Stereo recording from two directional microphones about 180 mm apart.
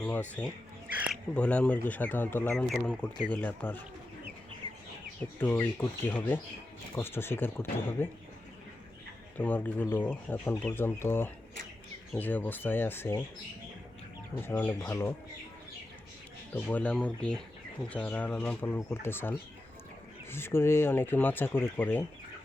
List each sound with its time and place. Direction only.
0.0 s speech: 10° left (ahead or behind)
4.6 s chicken: 30° right (ahead or behind)
5.2 s speech: 10° left (ahead or behind)
9.4 s speech: 10° left (ahead or behind)
14.4 s speech: 10° left (ahead or behind)
16.6 s speech: 10° left (ahead or behind)